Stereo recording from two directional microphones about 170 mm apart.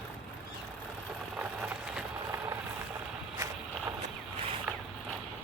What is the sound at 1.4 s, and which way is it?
Vehicle, 10° right (ahead or behind).